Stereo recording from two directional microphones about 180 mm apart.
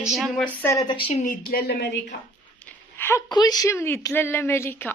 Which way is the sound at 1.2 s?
50° left (ahead or behind).